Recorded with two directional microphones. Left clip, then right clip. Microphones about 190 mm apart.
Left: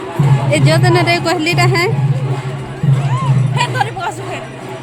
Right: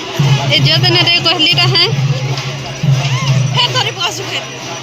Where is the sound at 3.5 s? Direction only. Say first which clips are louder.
Right 4 dB; 55° left (ahead or behind).